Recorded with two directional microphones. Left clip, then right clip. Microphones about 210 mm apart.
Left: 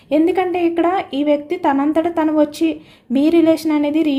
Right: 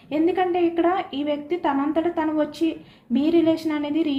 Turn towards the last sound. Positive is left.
turn(degrees=55)  # may be behind; listen again after turning